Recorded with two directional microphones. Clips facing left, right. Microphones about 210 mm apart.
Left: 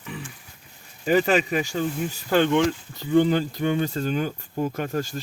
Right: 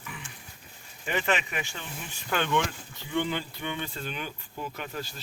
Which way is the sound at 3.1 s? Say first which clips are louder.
Left 11 dB; 40° left (ahead or behind).